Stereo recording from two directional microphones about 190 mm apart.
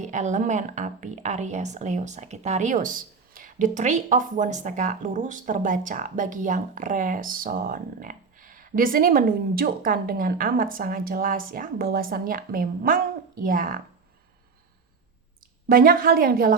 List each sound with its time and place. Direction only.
0.0 s a woman's voice: 40° right (ahead or behind)
15.7 s a woman's voice: 50° right (ahead or behind)